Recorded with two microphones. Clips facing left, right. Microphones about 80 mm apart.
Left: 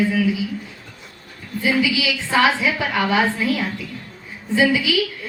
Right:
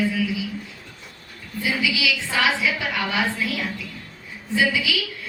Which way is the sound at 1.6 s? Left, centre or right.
Left.